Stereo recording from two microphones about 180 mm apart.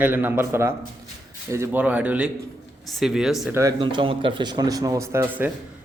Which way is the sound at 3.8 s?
25° right (ahead or behind).